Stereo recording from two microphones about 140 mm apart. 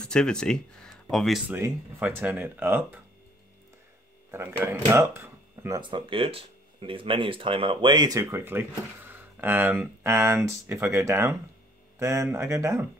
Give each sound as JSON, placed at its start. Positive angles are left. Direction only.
{"t": 0.0, "sound": "speech", "side_deg": 5}
{"t": 1.5, "sound": "speech", "side_deg": -15}
{"t": 4.3, "sound": "speech", "side_deg": -15}
{"t": 5.8, "sound": "speech", "side_deg": -35}